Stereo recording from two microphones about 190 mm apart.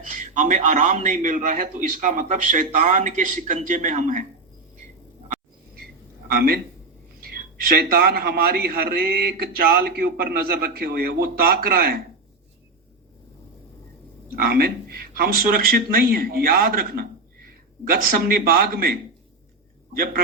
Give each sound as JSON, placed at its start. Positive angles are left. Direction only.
{"t": 0.1, "sound": "a man's voice", "side_deg": -40}
{"t": 6.2, "sound": "a man's voice", "side_deg": -55}
{"t": 14.3, "sound": "a man's voice", "side_deg": -55}